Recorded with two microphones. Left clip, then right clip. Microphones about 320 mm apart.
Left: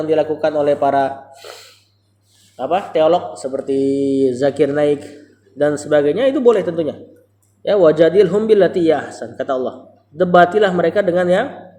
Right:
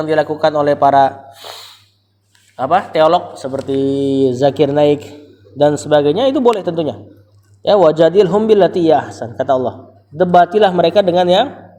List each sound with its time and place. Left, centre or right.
0.0 s speech: right